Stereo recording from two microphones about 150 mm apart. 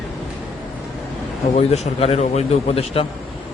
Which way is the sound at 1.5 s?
45° left (ahead or behind).